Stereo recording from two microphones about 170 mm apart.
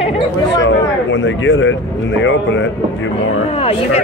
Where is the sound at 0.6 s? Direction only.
90° left.